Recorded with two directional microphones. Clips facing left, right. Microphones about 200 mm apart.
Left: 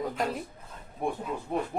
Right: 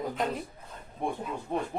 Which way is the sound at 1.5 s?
5° left (ahead or behind).